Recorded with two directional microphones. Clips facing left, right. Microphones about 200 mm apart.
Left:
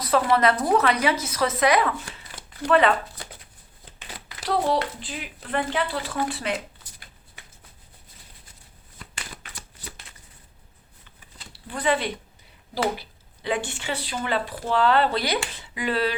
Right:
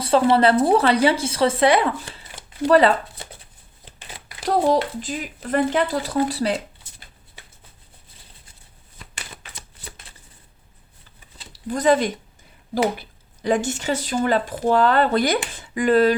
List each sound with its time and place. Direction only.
0.0 s speech: 30° right (ahead or behind)
3.2 s a sound: 25° right (ahead or behind)
4.4 s speech: 40° right (ahead or behind)
11.5 s speech: 40° right (ahead or behind)